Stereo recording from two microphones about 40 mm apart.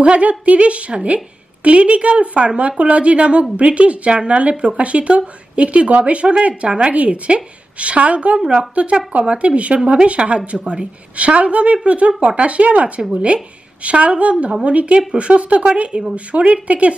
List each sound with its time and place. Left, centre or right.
0.0 s a woman's voice: right
10.6 s a woman's voice: right